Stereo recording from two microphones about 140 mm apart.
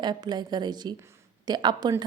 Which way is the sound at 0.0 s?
30° right (ahead or behind).